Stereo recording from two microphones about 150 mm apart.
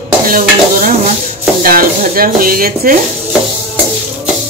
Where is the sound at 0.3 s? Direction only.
65° right (ahead or behind).